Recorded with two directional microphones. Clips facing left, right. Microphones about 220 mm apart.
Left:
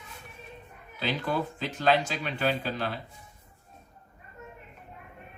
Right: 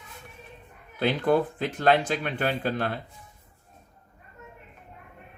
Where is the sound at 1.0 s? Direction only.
55° right (ahead or behind).